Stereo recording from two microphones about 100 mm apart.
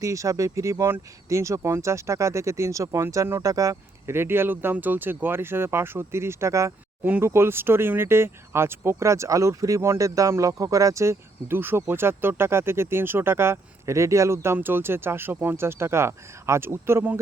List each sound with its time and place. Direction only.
0.0 s speech: 35° right (ahead or behind)